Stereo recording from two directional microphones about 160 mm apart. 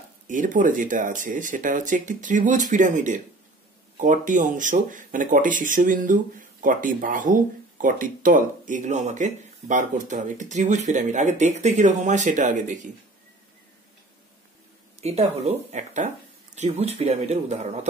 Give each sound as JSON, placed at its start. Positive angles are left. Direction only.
{"t": 0.3, "sound": "speech", "side_deg": -55}
{"t": 15.0, "sound": "speech", "side_deg": -40}